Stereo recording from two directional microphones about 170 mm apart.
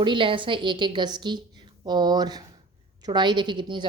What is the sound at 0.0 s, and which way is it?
A woman's voice, 30° right (ahead or behind).